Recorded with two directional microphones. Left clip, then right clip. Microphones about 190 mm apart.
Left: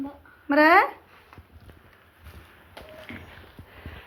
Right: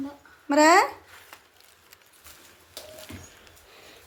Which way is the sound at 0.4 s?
15° right (ahead or behind).